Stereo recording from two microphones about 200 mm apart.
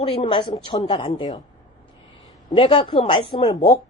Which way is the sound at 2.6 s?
25° left (ahead or behind).